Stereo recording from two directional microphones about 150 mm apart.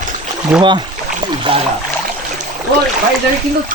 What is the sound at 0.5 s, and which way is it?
Speech, 5° right (ahead or behind).